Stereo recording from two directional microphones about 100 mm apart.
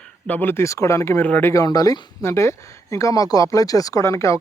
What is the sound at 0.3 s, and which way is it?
Speech, 20° left (ahead or behind).